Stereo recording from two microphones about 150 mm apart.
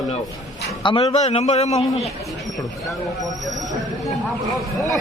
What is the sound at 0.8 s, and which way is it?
A man's voice, 35° left (ahead or behind).